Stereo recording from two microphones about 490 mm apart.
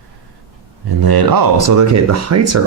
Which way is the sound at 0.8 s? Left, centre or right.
Right.